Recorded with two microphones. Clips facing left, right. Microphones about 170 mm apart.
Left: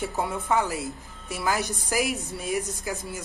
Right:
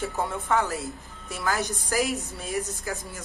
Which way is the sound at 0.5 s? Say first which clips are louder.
Even; 15° left (ahead or behind).